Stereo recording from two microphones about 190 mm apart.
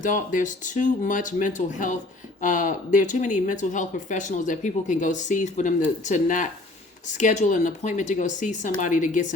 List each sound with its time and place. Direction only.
0.0 s speech: 45° left (ahead or behind)